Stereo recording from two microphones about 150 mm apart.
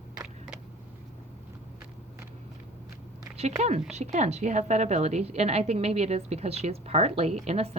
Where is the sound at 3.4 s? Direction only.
45° right (ahead or behind).